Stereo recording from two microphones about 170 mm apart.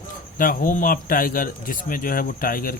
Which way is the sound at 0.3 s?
55° left (ahead or behind).